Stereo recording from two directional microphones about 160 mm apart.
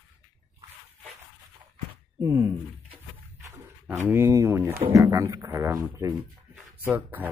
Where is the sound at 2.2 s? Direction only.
20° right (ahead or behind).